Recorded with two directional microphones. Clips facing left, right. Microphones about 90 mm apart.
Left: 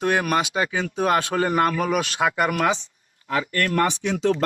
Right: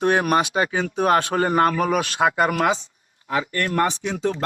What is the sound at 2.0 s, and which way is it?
A man's voice, 20° right (ahead or behind).